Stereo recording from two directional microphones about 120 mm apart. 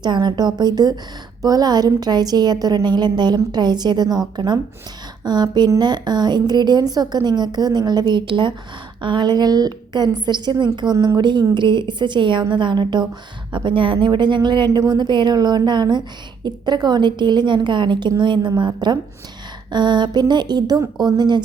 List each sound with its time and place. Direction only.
0.0 s a woman's voice: 40° right (ahead or behind)